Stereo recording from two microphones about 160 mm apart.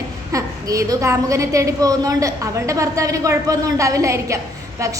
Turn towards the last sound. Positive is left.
turn(degrees=-20)  # may be behind; listen again after turning